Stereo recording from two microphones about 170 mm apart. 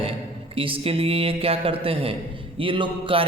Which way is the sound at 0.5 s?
30° right (ahead or behind).